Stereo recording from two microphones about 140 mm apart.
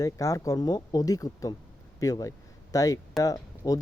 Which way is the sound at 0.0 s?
25° left (ahead or behind).